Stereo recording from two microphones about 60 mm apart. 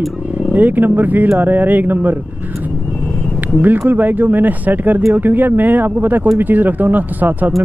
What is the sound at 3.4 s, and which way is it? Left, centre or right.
Speech, right.